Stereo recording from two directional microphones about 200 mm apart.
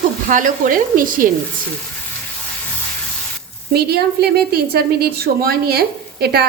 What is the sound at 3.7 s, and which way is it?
A woman's voice, 50° right (ahead or behind).